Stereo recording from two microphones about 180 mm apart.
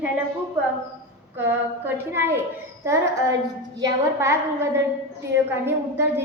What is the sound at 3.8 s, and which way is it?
A woman's voice, 15° right (ahead or behind).